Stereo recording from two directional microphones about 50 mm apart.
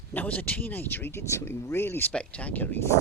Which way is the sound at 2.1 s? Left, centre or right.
Left.